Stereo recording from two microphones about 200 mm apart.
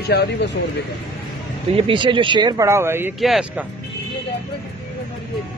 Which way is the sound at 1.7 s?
25° right (ahead or behind).